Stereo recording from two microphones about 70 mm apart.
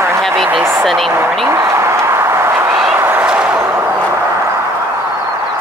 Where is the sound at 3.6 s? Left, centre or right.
Right.